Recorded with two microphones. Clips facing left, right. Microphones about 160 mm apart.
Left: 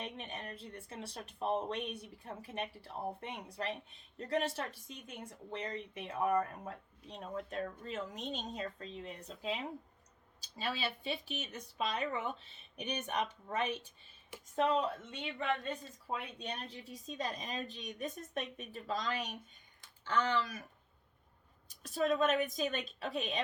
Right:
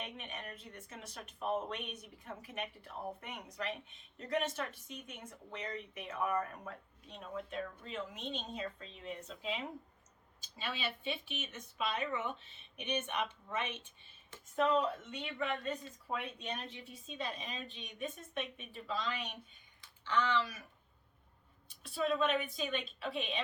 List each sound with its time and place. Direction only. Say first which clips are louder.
0.0 s speech: left 2 dB; 35° left (ahead or behind)
10.4 s speech: left 3 dB; 35° left (ahead or behind)
21.7 s speech: left 2 dB; 40° left (ahead or behind)